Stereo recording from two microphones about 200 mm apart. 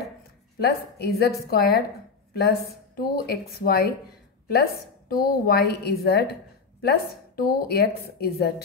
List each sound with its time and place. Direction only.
0.6 s a woman's voice: 50° left (ahead or behind)